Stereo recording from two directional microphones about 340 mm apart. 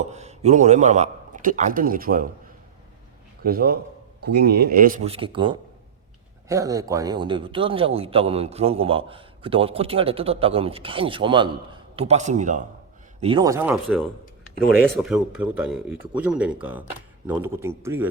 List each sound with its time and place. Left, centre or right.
0.1 s a man's voice: centre
3.4 s a man's voice: right; by 18.1 s centre